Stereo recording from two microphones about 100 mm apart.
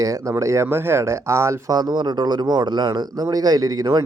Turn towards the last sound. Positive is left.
turn(degrees=-40)  # may be behind; listen again after turning